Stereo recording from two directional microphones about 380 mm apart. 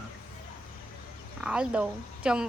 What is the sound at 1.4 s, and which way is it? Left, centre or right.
Speech, centre.